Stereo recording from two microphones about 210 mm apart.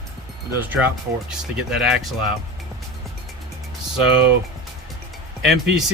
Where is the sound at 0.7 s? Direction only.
10° right (ahead or behind).